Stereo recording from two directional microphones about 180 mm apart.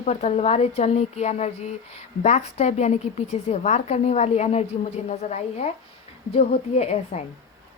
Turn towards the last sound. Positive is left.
turn(degrees=35)  # may be behind; listen again after turning